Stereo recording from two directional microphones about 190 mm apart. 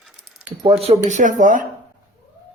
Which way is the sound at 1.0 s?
40° right (ahead or behind).